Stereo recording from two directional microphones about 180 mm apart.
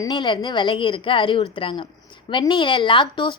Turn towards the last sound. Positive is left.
turn(degrees=25)  # may be behind; listen again after turning